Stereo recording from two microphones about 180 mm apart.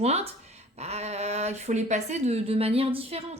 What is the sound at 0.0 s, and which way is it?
Speech, 35° right (ahead or behind).